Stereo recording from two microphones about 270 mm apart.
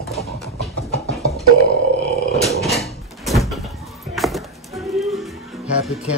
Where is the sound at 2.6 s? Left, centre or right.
Centre.